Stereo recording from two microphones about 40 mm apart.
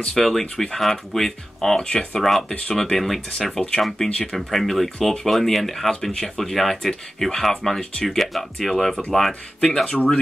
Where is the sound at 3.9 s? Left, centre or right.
Centre.